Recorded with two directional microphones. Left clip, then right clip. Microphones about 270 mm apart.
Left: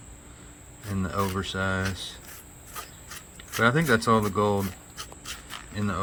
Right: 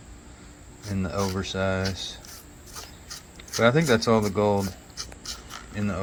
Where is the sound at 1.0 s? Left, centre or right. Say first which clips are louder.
Even; centre.